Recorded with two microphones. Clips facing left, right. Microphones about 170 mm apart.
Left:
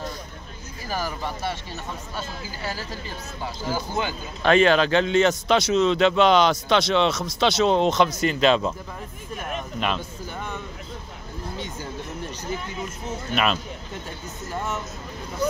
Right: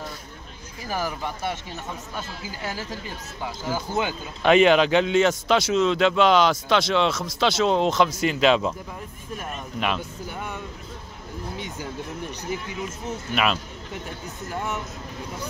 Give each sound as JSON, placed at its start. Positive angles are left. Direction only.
{"t": 0.8, "sound": "a man's voice", "side_deg": -15}
{"t": 9.8, "sound": "a man's voice", "side_deg": -10}
{"t": 14.5, "sound": "speech", "side_deg": -15}